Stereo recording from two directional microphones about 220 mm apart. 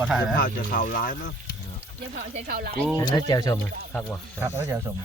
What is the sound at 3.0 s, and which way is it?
Speech, 20° left (ahead or behind).